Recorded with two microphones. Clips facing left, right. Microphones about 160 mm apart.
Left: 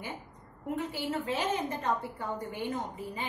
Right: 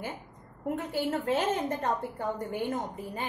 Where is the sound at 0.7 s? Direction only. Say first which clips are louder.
Right 2 dB; 50° right (ahead or behind).